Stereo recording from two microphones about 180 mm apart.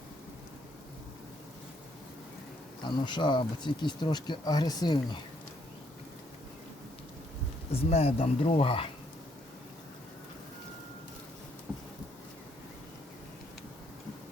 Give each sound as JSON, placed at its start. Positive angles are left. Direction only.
{"t": 2.8, "sound": "speech", "side_deg": 25}
{"t": 7.7, "sound": "speech", "side_deg": 35}